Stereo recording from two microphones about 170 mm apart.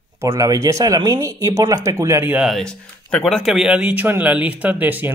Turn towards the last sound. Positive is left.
turn(degrees=-10)  # may be behind; listen again after turning